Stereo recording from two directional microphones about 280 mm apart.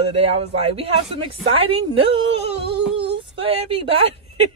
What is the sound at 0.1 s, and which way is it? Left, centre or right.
Speech, right.